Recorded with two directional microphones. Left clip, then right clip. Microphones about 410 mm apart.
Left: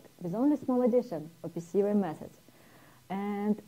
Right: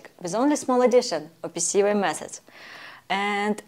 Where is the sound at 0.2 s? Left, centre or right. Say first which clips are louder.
Right 7 dB; centre.